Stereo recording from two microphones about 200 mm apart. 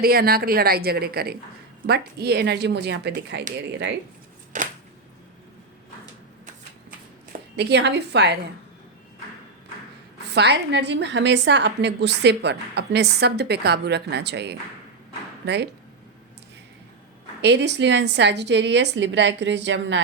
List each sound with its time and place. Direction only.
0.0 s a woman's voice: 50° right (ahead or behind)
4.5 s a sound: 40° right (ahead or behind)
7.5 s a woman's voice: 60° right (ahead or behind)
10.3 s a woman's voice: 60° right (ahead or behind)
17.4 s a woman's voice: 60° right (ahead or behind)